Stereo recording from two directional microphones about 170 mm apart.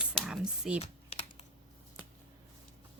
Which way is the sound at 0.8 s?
35° left (ahead or behind).